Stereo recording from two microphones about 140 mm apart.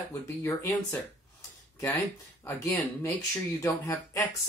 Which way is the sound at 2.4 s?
15° left (ahead or behind).